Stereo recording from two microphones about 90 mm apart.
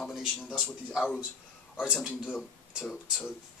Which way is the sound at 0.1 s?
5° right (ahead or behind).